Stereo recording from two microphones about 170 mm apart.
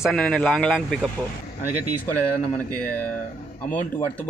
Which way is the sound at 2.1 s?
10° left (ahead or behind).